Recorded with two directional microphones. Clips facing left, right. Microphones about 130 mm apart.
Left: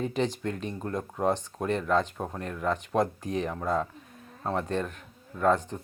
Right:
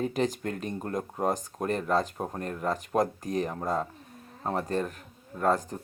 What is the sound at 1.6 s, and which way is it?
Speech, 40° right (ahead or behind).